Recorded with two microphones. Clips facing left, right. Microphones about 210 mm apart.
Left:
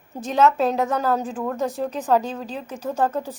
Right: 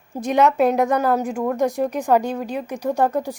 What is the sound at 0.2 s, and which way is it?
A woman's voice, 15° right (ahead or behind).